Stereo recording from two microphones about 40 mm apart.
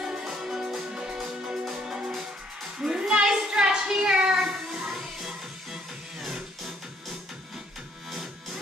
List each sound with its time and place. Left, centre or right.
0.0 s music: centre
2.8 s a sound: centre
4.7 s music: centre